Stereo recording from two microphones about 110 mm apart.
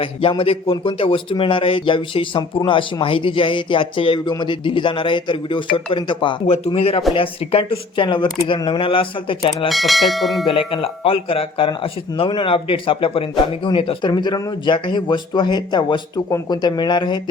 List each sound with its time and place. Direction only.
0.0 s speech: 55° left (ahead or behind)
6.7 s speech: 60° left (ahead or behind)
8.0 s speech: 45° left (ahead or behind)
9.6 s speech: centre (ahead or behind)
10.5 s speech: 55° left (ahead or behind)
14.1 s speech: 40° left (ahead or behind)